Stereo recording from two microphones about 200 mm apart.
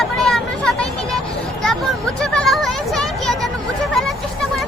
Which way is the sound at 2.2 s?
5° left (ahead or behind).